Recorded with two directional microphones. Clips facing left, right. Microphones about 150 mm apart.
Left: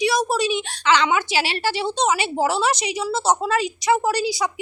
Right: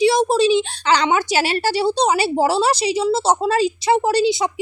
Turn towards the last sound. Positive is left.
turn(degrees=-25)  # may be behind; listen again after turning